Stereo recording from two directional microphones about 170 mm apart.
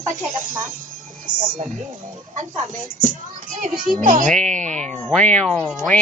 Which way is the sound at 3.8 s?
50° right (ahead or behind).